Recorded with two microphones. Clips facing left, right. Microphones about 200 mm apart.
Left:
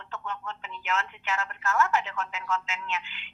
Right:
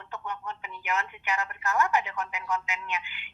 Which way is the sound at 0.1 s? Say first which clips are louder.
Even; 15° right (ahead or behind).